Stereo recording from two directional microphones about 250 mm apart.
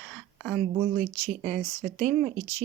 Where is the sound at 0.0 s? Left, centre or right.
Centre.